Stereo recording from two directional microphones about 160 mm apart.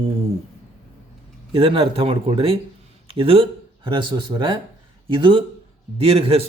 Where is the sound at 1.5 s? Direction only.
35° right (ahead or behind).